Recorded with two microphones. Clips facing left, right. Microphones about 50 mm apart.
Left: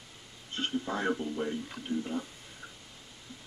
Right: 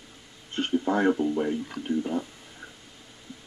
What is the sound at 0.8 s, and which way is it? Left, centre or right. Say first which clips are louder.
Speech: right 11 dB; right.